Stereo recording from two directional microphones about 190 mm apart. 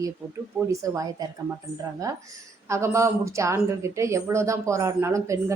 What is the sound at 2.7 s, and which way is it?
A woman's voice, 15° right (ahead or behind).